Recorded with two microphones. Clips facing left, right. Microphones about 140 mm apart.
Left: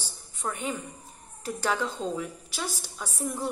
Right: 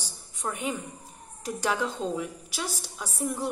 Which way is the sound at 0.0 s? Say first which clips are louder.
Even; 10° right (ahead or behind).